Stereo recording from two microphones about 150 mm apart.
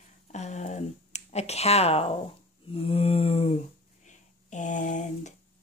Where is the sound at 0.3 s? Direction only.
50° left (ahead or behind).